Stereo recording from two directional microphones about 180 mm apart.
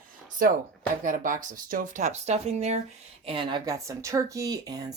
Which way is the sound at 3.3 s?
25° right (ahead or behind).